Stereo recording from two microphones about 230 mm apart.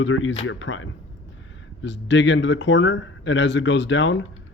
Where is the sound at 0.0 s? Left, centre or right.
Left.